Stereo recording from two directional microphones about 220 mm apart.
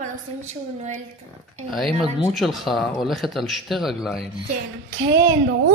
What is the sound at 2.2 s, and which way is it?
Speech, centre (ahead or behind).